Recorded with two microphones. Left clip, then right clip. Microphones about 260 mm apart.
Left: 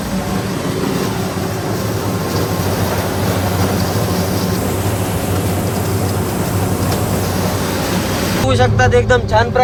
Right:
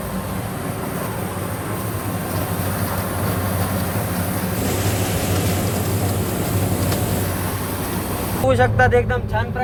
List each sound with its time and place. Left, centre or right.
8.4 s speech: centre